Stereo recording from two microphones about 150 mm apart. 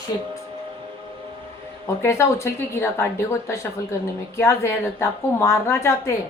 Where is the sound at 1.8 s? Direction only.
20° left (ahead or behind).